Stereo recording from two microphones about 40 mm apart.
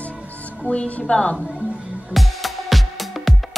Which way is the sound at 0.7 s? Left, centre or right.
Left.